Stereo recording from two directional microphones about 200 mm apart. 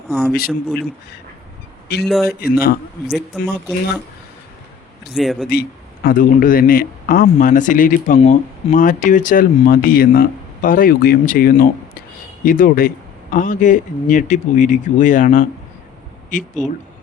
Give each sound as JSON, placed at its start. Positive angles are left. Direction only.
{"t": 0.1, "sound": "speech", "side_deg": -5}
{"t": 1.9, "sound": "speech", "side_deg": 50}
{"t": 3.1, "sound": "speech", "side_deg": 0}
{"t": 5.1, "sound": "speech", "side_deg": 0}
{"t": 5.5, "sound": "speech", "side_deg": 50}